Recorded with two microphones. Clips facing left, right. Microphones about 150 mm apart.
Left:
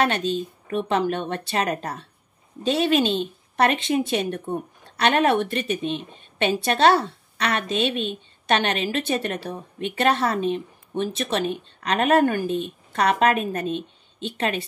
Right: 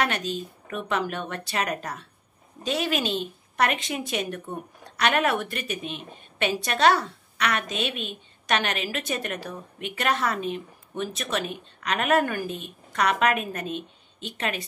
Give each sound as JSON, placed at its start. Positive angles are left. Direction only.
{"t": 0.0, "sound": "a woman's voice", "side_deg": 30}